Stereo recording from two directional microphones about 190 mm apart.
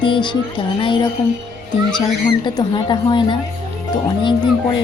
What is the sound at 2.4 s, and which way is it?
Speech, 25° left (ahead or behind).